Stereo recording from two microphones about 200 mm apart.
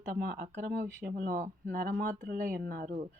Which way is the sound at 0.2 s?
45° right (ahead or behind).